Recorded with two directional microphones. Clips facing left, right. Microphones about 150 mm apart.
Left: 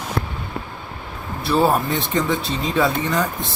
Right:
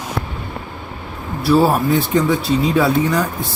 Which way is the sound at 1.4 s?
5° right (ahead or behind).